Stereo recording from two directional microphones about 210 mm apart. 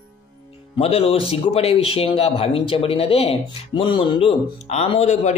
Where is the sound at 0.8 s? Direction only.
30° left (ahead or behind).